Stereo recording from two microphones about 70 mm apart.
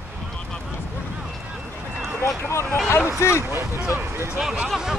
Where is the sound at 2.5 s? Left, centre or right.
Left.